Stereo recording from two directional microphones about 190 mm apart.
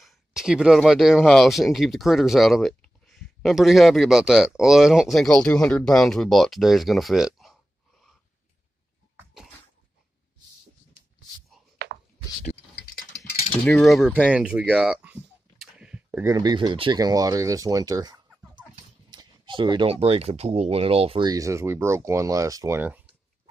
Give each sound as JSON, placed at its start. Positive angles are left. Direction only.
{"t": 0.0, "sound": "speech", "side_deg": 0}
{"t": 9.1, "sound": "bathtub", "side_deg": -5}
{"t": 13.7, "sound": "speech", "side_deg": 0}
{"t": 21.3, "sound": "speech", "side_deg": -15}